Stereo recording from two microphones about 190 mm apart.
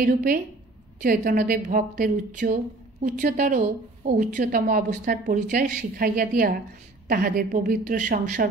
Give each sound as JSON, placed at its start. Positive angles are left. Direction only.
{"t": 0.0, "sound": "a woman's voice", "side_deg": -50}